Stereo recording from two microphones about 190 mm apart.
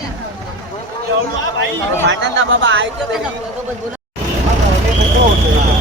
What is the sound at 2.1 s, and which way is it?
Speech, 80° right.